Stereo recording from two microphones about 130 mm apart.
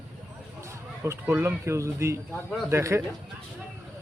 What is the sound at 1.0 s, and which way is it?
Speech, 20° right (ahead or behind).